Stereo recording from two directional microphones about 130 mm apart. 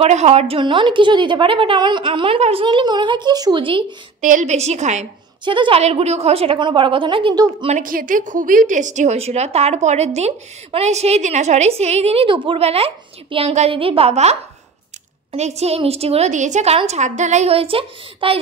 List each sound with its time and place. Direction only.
0.0 s a woman's voice: 55° right (ahead or behind); by 3.8 s 40° right (ahead or behind)
4.2 s speech: 75° right (ahead or behind)
5.4 s a woman's voice: 40° right (ahead or behind)
5.8 s a woman's voice: 55° right (ahead or behind); by 7.4 s 40° right (ahead or behind)
7.8 s a woman's voice: 90° right; by 14.3 s 55° right (ahead or behind)
15.3 s a woman's voice: 60° right (ahead or behind)